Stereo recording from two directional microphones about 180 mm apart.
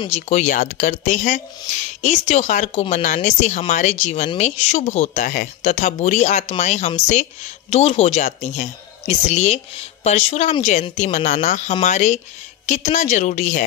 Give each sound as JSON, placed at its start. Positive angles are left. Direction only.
{"t": 0.1, "sound": "speech", "side_deg": 40}